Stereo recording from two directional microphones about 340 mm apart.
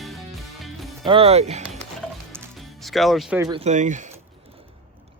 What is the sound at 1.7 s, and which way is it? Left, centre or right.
Music, centre.